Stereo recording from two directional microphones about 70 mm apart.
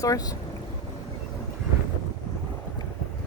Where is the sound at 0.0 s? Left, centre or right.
Left.